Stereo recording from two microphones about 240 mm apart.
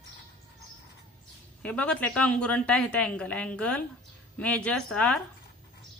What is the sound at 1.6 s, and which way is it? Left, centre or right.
A woman's voice, centre.